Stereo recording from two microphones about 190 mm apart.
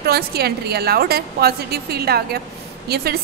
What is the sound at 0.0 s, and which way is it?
A woman's voice, 55° right (ahead or behind).